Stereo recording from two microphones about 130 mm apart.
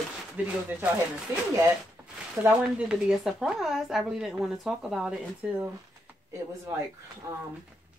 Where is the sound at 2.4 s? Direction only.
5° right (ahead or behind).